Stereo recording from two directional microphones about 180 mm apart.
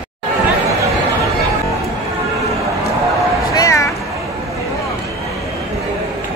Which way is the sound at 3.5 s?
20° left (ahead or behind).